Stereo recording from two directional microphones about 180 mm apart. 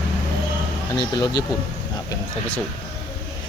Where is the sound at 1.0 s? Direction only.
25° left (ahead or behind).